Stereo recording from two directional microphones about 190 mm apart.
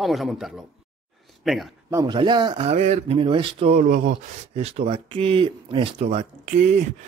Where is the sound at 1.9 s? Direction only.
20° right (ahead or behind).